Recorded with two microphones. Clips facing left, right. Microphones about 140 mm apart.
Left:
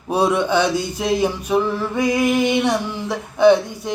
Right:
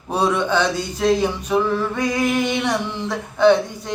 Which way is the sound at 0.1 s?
10° left (ahead or behind).